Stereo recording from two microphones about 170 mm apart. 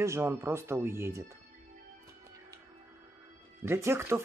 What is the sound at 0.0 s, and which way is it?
Speech, 15° right (ahead or behind).